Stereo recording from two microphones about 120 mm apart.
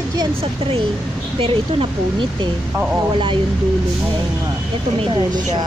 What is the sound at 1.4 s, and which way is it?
Speech, 50° right (ahead or behind).